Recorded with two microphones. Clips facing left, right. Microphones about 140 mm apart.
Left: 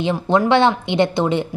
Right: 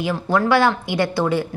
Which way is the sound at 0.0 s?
25° left (ahead or behind).